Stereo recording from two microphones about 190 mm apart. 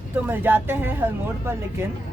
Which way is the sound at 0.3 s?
10° right (ahead or behind).